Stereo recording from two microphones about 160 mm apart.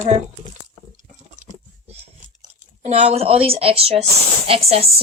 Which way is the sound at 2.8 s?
45° right (ahead or behind).